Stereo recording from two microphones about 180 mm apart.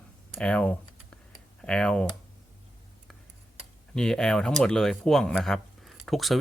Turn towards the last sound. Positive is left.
turn(degrees=0)  # may be behind; listen again after turning